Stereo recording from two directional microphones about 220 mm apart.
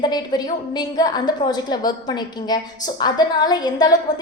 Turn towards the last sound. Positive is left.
turn(degrees=20)  # may be behind; listen again after turning